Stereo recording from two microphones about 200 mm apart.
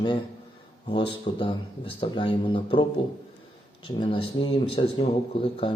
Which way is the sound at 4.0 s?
25° left (ahead or behind).